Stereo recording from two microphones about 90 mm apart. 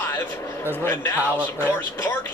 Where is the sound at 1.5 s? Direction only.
25° left (ahead or behind).